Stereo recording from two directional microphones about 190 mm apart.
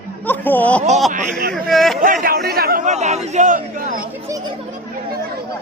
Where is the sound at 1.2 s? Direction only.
50° right (ahead or behind).